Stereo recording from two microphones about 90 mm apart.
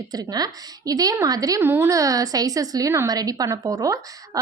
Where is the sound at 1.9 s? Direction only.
40° right (ahead or behind).